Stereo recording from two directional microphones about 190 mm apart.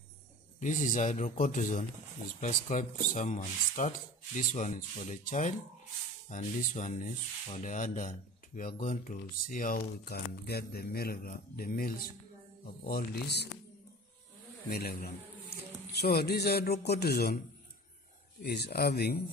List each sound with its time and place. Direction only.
0.6 s speech: 45° left (ahead or behind)
14.7 s a man's voice: 55° left (ahead or behind)
18.4 s a man's voice: 60° left (ahead or behind)